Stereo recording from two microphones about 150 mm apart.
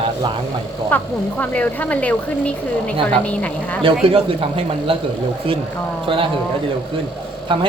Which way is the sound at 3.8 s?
40° right (ahead or behind).